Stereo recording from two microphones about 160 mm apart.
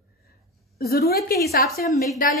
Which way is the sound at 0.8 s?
80° left.